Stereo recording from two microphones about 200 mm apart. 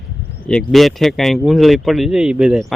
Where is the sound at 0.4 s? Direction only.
Centre (ahead or behind).